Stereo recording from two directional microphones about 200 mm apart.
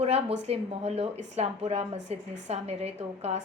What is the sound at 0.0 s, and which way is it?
Speech, 35° right (ahead or behind).